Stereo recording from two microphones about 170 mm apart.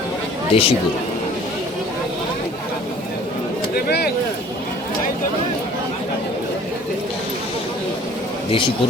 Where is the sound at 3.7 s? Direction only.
65° left (ahead or behind).